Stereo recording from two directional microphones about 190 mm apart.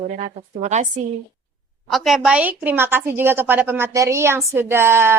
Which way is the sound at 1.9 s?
Centre (ahead or behind).